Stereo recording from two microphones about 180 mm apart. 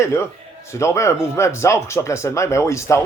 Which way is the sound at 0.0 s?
15° left (ahead or behind).